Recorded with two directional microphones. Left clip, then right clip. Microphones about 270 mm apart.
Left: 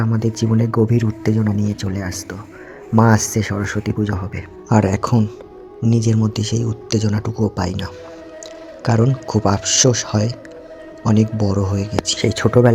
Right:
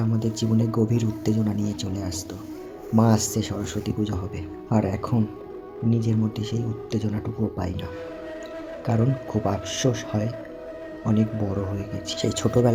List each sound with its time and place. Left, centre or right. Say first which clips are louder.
0.0 s speech: left 6 dB; centre